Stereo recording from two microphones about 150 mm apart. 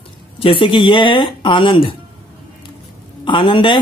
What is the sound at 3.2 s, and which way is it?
Speech, 35° left (ahead or behind).